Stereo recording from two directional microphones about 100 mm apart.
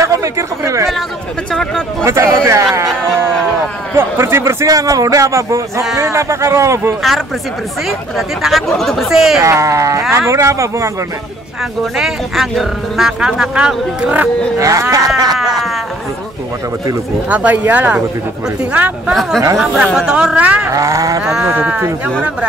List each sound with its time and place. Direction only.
0.0 s a sound: 30° right (ahead or behind)
1.5 s speech: 5° left (ahead or behind)
2.0 s speech: 30° right (ahead or behind)
3.9 s a man's voice: 25° right (ahead or behind)
8.2 s speech: centre (ahead or behind)
9.4 s a man's voice: 30° right (ahead or behind)
11.8 s speech: centre (ahead or behind)
14.6 s a man's voice: 35° right (ahead or behind)
17.3 s speech: 15° right (ahead or behind)
19.6 s speech: centre (ahead or behind)
20.7 s a man's voice: 30° right (ahead or behind)
21.2 s speech: 10° right (ahead or behind)